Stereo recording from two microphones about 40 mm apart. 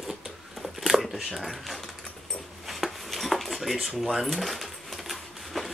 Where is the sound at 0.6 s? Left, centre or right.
Centre.